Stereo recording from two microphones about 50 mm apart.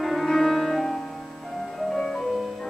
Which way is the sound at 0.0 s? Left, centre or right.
Centre.